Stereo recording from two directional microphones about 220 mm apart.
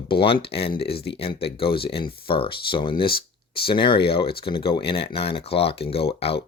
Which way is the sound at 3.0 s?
45° left (ahead or behind).